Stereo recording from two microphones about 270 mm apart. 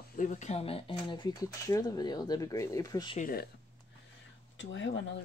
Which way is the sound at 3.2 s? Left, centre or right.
Left.